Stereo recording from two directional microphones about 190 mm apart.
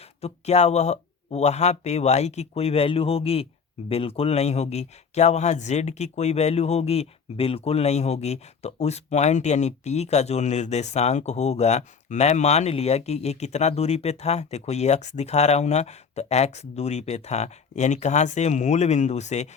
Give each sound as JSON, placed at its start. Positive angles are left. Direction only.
{"t": 0.2, "sound": "speech", "side_deg": 35}